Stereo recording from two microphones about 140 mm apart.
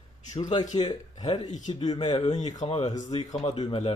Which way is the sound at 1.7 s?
35° left (ahead or behind).